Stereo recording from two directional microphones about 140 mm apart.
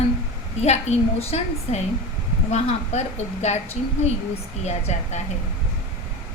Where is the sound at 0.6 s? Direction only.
50° left (ahead or behind).